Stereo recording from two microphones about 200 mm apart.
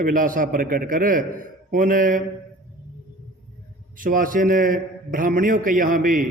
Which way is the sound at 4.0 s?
45° right (ahead or behind).